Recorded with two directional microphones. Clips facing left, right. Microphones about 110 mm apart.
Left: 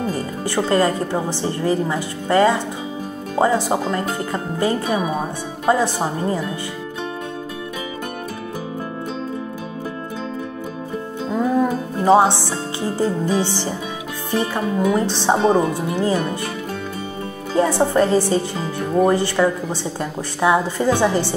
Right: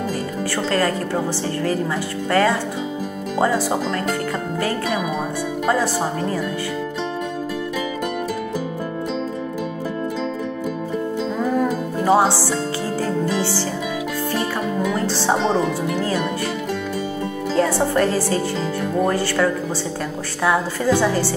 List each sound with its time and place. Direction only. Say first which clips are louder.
0.6 s a woman's voice: left 4 dB; 20° left (ahead or behind)
12.0 s music: left 3 dB; 20° left (ahead or behind)
13.0 s a woman's voice: left 3 dB; 20° left (ahead or behind)
17.6 s a woman's voice: left 2 dB; 20° left (ahead or behind)